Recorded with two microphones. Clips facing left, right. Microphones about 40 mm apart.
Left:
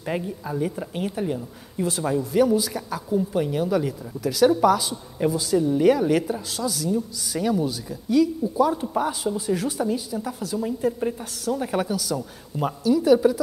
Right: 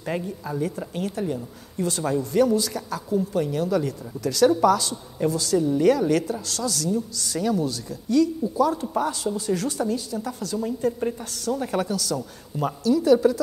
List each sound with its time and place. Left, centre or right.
0.0 s a woman's voice: centre